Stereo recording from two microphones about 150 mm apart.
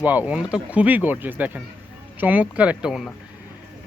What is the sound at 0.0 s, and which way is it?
Speech, 10° right (ahead or behind).